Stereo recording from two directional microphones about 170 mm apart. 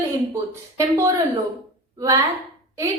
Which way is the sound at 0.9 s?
15° right (ahead or behind).